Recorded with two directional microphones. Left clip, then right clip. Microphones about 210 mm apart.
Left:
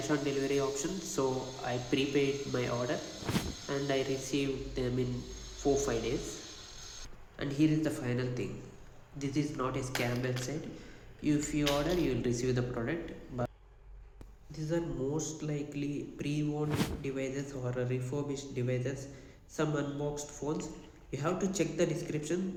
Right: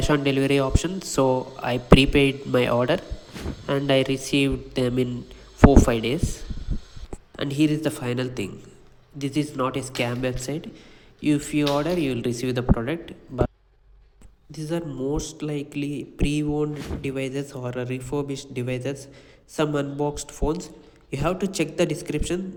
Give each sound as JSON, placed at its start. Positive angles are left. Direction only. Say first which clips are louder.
{"t": 0.0, "sound": "speech", "louder": "right 11 dB", "side_deg": -45}
{"t": 3.3, "sound": "cricket", "louder": "right 2 dB", "side_deg": 0}
{"t": 3.7, "sound": "speech", "louder": "right 12 dB", "side_deg": -45}
{"t": 7.3, "sound": "speech", "louder": "right 7 dB", "side_deg": -45}
{"t": 14.5, "sound": "speech", "louder": "right 6 dB", "side_deg": -50}